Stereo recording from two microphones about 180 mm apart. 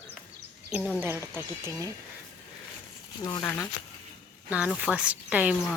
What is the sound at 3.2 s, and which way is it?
Speech, 20° left (ahead or behind).